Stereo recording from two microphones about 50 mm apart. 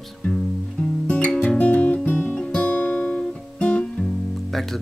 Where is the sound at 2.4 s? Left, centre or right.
Left.